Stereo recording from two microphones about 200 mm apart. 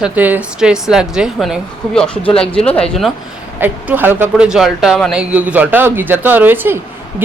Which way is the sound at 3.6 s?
10° right (ahead or behind).